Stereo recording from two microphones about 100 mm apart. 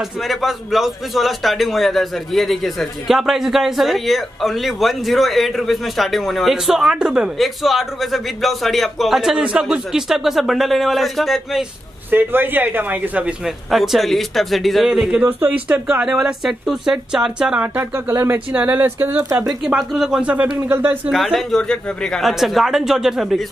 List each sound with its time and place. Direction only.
0.3 s a man's voice: centre (ahead or behind)
12.1 s speech: 20° right (ahead or behind)
13.7 s a man's voice: centre (ahead or behind); by 19.2 s 20° right (ahead or behind)
19.8 s speech: centre (ahead or behind); by 21.0 s 20° right (ahead or behind)
21.1 s a man's voice: centre (ahead or behind)